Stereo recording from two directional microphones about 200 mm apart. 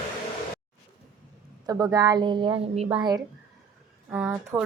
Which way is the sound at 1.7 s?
20° right (ahead or behind).